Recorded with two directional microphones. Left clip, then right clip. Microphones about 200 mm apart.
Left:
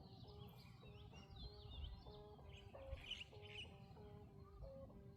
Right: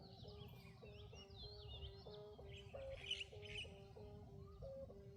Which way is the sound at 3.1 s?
50° right (ahead or behind).